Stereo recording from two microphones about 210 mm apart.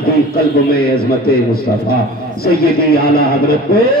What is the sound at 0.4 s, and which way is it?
A man's voice, 45° left (ahead or behind).